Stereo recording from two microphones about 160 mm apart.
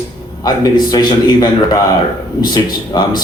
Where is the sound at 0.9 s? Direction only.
30° left (ahead or behind).